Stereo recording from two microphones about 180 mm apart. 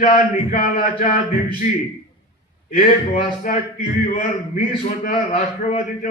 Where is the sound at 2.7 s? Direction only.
50° left (ahead or behind).